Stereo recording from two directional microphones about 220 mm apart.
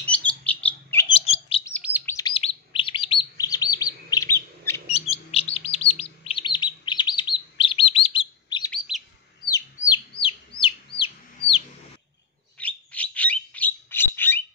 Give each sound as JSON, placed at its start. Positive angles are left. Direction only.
{"t": 0.0, "sound": "bird", "side_deg": 5}
{"t": 1.0, "sound": "bird", "side_deg": 25}
{"t": 2.0, "sound": "chirp", "side_deg": 15}
{"t": 4.8, "sound": "chirp", "side_deg": 25}
{"t": 8.7, "sound": "chirp", "side_deg": 0}
{"t": 10.1, "sound": "chicken", "side_deg": 25}
{"t": 12.5, "sound": "bird", "side_deg": 5}